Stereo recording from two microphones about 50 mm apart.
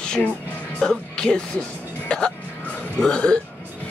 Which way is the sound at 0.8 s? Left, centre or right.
Centre.